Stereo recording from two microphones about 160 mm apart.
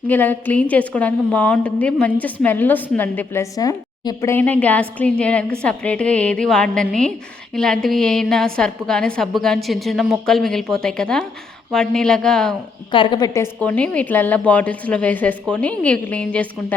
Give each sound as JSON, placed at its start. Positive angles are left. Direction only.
{"t": 0.1, "sound": "a woman's voice", "side_deg": 10}
{"t": 12.9, "sound": "a woman's voice", "side_deg": 30}
{"t": 13.6, "sound": "a woman's voice", "side_deg": 5}